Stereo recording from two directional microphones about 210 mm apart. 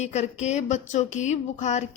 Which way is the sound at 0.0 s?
30° left (ahead or behind).